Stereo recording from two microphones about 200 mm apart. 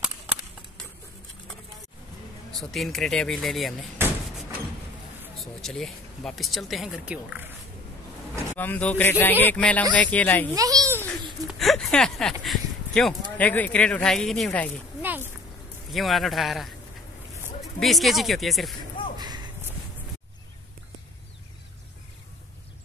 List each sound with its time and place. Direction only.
2.5 s speech: centre (ahead or behind)
4.0 s a sound: 10° right (ahead or behind)
5.4 s speech: centre (ahead or behind)
8.5 s speech: 10° left (ahead or behind)
10.5 s a child's voice: 15° right (ahead or behind)
11.5 s speech: centre (ahead or behind)
15.0 s a sound: 10° right (ahead or behind)
15.9 s speech: centre (ahead or behind)
19.1 s a sound: 20° right (ahead or behind)